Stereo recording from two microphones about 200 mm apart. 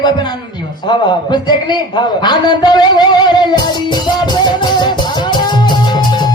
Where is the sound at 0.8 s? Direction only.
20° left (ahead or behind).